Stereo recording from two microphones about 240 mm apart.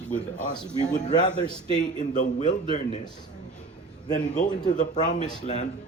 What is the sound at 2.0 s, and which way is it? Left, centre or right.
Speech, left.